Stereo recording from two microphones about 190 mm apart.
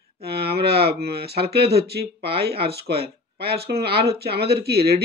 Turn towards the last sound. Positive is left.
turn(degrees=-55)  # may be behind; listen again after turning